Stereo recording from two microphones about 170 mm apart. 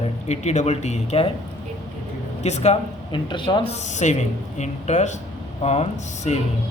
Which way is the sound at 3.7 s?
45° left (ahead or behind).